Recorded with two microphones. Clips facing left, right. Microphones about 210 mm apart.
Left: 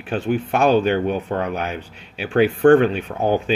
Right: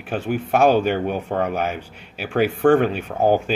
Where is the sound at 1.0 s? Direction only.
50° right (ahead or behind).